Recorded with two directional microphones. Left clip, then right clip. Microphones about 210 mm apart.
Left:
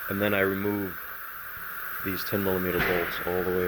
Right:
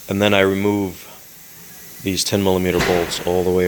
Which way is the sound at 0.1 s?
25° right (ahead or behind).